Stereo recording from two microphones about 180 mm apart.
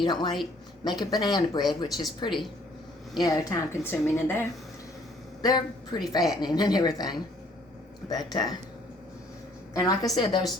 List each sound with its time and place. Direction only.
0.0 s a woman's voice: 25° left (ahead or behind)
9.7 s a woman's voice: 20° left (ahead or behind)